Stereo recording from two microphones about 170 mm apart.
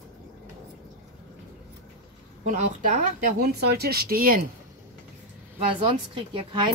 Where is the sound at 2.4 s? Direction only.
45° right (ahead or behind).